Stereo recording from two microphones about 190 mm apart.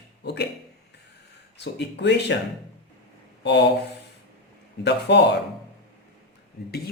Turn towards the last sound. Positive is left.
turn(degrees=55)  # may be behind; listen again after turning